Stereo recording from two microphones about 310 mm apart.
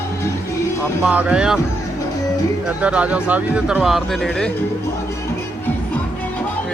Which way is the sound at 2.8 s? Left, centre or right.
Centre.